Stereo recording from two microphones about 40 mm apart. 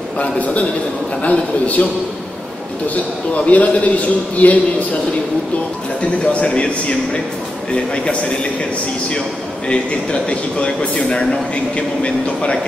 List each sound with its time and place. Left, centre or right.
0.2 s a man's voice: left
3.4 s a man's voice: left
6.2 s speech: left
9.7 s speech: left